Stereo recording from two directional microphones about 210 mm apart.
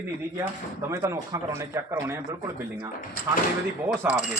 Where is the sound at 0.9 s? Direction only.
15° right (ahead or behind).